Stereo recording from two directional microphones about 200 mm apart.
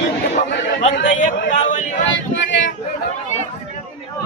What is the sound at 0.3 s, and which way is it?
Chatter, 35° left (ahead or behind).